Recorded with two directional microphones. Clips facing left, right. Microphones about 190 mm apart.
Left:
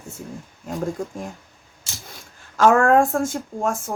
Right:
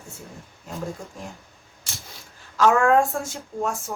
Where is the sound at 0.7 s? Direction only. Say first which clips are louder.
Left 6 dB; 50° left (ahead or behind).